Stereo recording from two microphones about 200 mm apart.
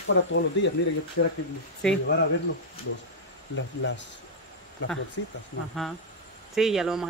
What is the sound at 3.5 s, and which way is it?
Speech, 65° left (ahead or behind).